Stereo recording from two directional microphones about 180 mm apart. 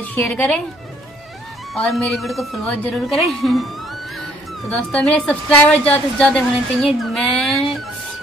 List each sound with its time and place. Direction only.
0.0 s speech: 5° left (ahead or behind)
1.7 s a woman's voice: centre (ahead or behind)
4.6 s a woman's voice: 5° left (ahead or behind)
7.0 s child singing: centre (ahead or behind)